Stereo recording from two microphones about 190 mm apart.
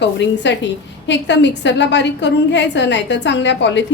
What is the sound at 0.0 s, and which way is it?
A woman's voice, 65° left (ahead or behind).